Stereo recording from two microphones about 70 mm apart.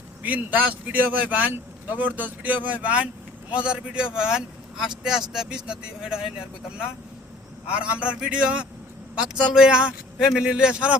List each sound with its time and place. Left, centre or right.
0.2 s speech: right